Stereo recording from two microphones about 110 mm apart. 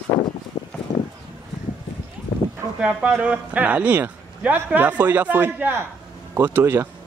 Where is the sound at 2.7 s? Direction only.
10° right (ahead or behind).